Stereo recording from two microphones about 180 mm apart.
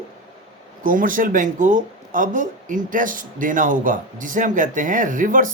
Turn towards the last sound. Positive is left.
turn(degrees=-45)  # may be behind; listen again after turning